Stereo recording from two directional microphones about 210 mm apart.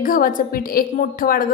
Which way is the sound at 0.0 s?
40° left (ahead or behind).